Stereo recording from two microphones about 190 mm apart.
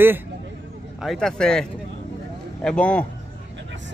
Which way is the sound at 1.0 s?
Centre (ahead or behind).